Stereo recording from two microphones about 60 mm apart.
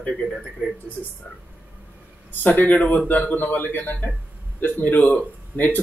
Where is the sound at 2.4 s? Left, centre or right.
Left.